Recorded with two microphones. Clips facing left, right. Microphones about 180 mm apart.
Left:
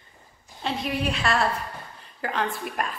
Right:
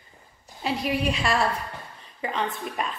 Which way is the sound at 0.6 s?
Centre (ahead or behind).